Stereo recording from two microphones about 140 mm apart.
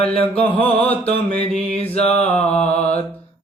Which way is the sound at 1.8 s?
45° left (ahead or behind).